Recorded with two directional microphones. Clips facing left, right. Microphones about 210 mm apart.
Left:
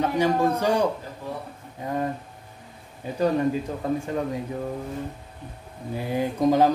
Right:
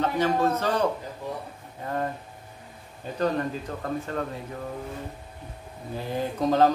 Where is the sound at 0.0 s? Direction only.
10° left (ahead or behind).